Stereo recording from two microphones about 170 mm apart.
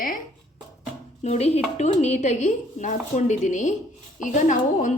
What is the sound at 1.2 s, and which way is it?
A woman's voice, 40° left (ahead or behind).